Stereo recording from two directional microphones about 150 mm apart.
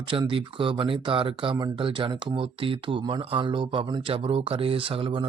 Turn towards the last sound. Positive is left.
turn(degrees=-35)  # may be behind; listen again after turning